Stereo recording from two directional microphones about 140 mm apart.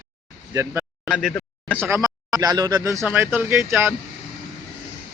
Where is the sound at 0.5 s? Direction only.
20° right (ahead or behind).